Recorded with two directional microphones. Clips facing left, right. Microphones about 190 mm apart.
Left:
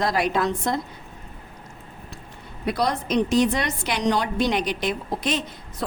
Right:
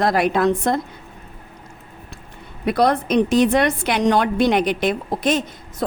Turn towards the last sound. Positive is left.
turn(degrees=-45)  # may be behind; listen again after turning